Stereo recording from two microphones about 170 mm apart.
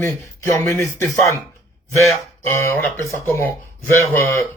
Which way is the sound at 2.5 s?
15° left (ahead or behind).